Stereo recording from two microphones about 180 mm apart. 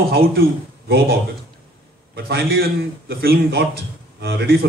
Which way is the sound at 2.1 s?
60° right (ahead or behind).